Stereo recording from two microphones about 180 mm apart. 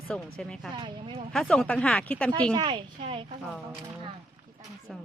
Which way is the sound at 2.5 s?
25° right (ahead or behind).